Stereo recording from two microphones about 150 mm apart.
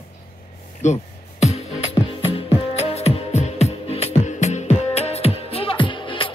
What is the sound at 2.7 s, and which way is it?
Music, 45° left (ahead or behind).